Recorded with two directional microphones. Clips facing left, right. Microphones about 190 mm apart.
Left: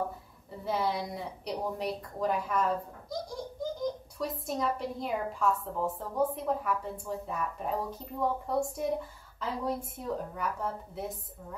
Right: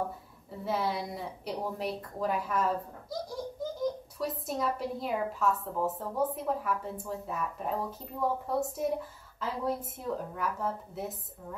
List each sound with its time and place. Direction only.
0.7 s a woman's voice: centre (ahead or behind)
4.2 s a woman's voice: 5° right (ahead or behind)